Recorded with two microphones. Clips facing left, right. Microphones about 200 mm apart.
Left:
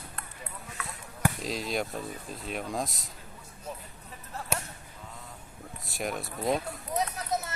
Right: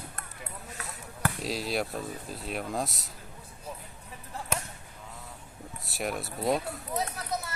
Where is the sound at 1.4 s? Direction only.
5° right (ahead or behind).